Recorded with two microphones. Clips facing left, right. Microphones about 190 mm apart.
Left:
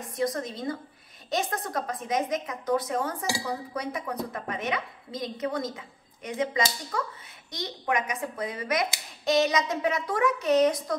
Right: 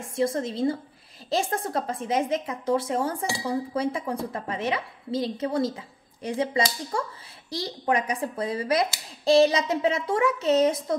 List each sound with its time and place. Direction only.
0.0 s a woman's voice: 30° right (ahead or behind)